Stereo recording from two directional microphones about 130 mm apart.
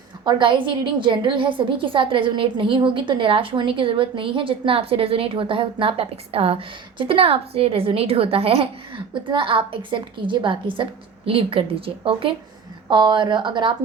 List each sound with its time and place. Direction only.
0.3 s a woman's voice: 35° right (ahead or behind)